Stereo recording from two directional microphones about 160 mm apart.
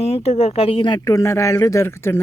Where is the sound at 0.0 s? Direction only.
40° left (ahead or behind).